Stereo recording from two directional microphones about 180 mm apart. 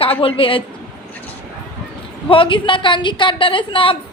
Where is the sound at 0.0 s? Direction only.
30° left (ahead or behind).